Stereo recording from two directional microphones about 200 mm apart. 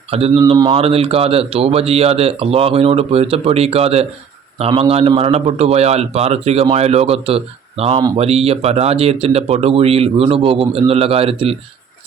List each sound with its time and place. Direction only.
0.1 s a man's voice: 30° right (ahead or behind)